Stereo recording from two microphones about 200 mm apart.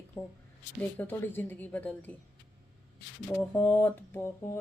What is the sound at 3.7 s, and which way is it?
Speech, 10° left (ahead or behind).